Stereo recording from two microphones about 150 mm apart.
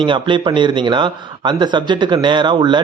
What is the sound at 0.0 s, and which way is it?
Speech, 35° right (ahead or behind).